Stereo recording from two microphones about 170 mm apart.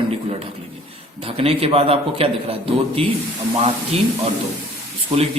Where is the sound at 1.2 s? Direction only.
35° right (ahead or behind).